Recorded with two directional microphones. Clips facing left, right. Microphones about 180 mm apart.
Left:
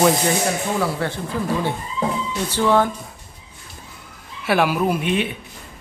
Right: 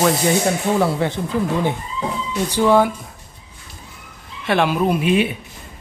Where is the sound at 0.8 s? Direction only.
20° right (ahead or behind).